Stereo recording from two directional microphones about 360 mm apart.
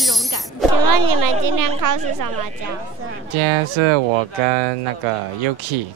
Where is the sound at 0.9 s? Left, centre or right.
Right.